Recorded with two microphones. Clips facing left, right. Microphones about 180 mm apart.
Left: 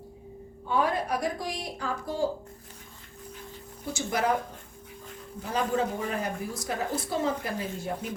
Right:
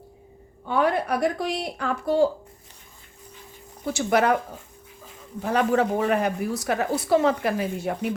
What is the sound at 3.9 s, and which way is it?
Speech, 70° right (ahead or behind).